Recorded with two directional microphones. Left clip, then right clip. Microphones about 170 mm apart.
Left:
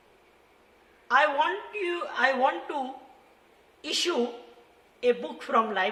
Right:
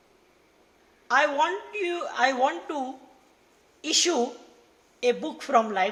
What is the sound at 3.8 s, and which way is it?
Speech, 30° right (ahead or behind).